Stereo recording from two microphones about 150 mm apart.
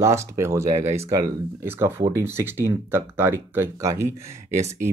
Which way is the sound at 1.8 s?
15° right (ahead or behind).